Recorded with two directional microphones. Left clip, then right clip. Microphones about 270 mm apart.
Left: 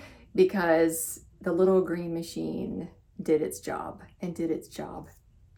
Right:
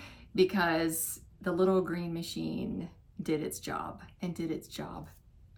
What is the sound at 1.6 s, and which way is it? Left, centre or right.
Speech, right.